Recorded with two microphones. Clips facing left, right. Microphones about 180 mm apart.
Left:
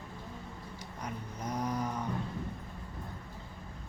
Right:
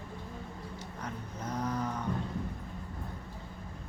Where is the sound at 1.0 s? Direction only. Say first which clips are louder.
Left 1 dB; 10° left (ahead or behind).